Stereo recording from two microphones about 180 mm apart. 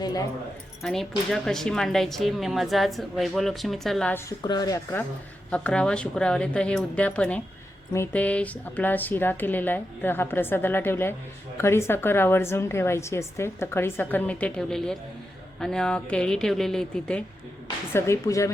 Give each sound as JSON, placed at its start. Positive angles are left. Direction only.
{"t": 0.0, "sound": "speech", "side_deg": 20}
{"t": 0.8, "sound": "speech", "side_deg": 0}
{"t": 4.3, "sound": "a woman's voice", "side_deg": 20}
{"t": 17.9, "sound": "a woman's voice", "side_deg": 15}